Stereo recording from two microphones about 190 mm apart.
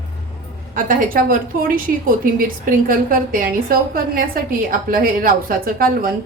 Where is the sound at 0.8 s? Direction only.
45° right (ahead or behind).